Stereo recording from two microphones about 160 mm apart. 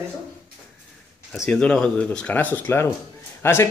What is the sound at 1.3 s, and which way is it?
A man's voice, 5° left (ahead or behind).